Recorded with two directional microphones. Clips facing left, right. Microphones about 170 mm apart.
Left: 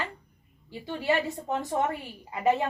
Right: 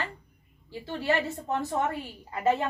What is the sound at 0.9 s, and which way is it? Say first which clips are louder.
Speech: left 1 dB; 15° left (ahead or behind).